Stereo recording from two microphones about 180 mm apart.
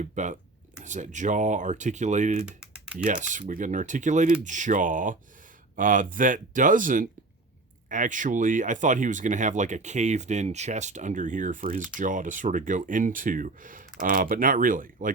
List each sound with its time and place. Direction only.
0.0 s speech: 40° right (ahead or behind)
2.5 s typing: 5° right (ahead or behind)
3.0 s speech: 45° right (ahead or behind)